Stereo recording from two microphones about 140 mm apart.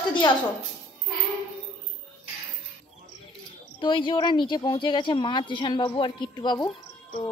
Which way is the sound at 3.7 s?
35° left (ahead or behind).